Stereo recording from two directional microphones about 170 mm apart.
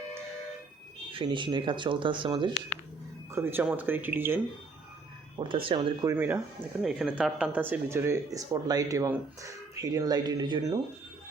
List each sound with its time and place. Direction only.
1.1 s speech: 30° right (ahead or behind)
3.3 s speech: 10° right (ahead or behind)
5.4 s speech: 30° right (ahead or behind)
6.1 s speech: 15° right (ahead or behind)
6.8 s speech: centre (ahead or behind); by 10.8 s 25° right (ahead or behind)